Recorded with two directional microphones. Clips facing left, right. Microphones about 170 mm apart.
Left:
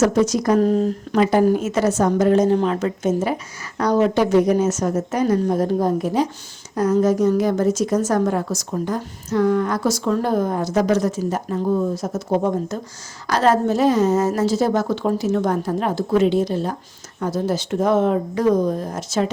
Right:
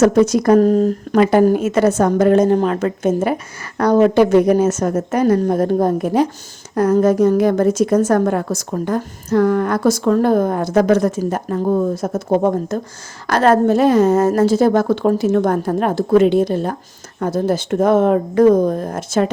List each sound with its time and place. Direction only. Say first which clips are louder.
0.0 s a woman's voice: right 5 dB; 55° right (ahead or behind)